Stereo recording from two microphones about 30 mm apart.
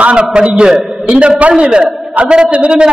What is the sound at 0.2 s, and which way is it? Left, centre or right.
A man's voice, right.